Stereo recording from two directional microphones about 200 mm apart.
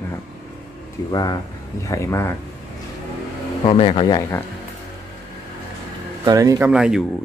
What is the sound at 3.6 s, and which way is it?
Speech, 30° left (ahead or behind).